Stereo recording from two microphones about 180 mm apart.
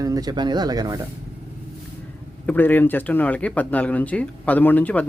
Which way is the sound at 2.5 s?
10° left (ahead or behind).